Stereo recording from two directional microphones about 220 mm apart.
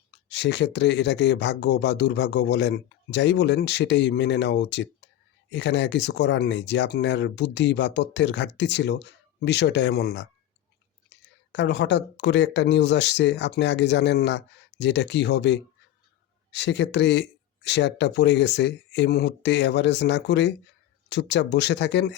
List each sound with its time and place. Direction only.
0.3 s speech: 50° left (ahead or behind)